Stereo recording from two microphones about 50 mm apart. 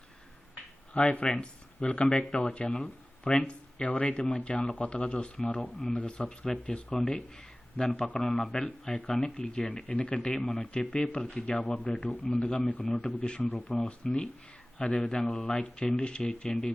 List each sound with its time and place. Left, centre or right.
0.9 s speech: left
10.2 s speech: centre; by 12.9 s left
12.9 s speech: centre